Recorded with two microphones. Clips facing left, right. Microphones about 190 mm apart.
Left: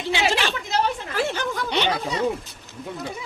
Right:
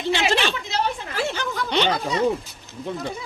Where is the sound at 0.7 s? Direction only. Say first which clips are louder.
Left 2 dB; 50° left (ahead or behind).